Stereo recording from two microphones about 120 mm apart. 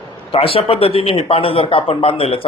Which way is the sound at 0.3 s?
50° left (ahead or behind).